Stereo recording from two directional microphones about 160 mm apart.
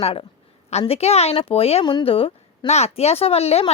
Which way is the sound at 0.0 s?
35° left (ahead or behind).